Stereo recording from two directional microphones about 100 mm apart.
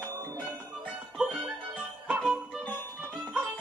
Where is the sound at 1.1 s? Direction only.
10° right (ahead or behind).